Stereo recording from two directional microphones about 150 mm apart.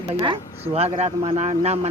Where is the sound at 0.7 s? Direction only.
45° right (ahead or behind).